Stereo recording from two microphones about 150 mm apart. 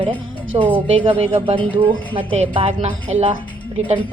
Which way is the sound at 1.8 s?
10° left (ahead or behind).